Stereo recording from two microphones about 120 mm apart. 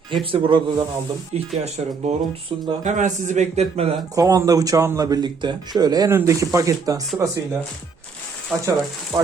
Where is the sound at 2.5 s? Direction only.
50° right (ahead or behind).